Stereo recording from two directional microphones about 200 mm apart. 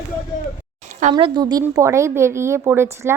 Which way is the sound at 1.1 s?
20° right (ahead or behind).